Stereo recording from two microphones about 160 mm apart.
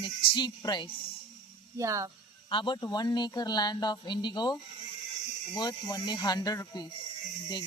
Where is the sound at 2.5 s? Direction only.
30° left (ahead or behind).